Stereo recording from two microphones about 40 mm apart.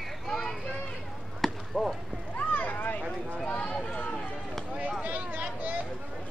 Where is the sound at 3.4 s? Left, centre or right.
Left.